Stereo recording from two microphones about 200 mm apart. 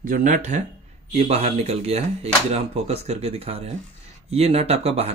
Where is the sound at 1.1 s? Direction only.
30° right (ahead or behind).